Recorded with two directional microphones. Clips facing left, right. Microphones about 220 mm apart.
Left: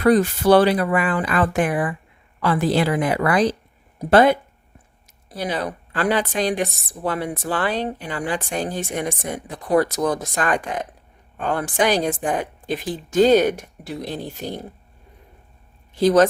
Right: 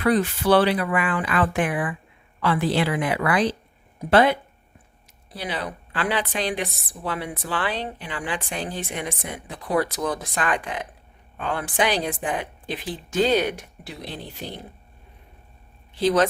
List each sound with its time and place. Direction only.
0.0 s a woman's voice: 40° left (ahead or behind)
16.0 s a woman's voice: 45° left (ahead or behind)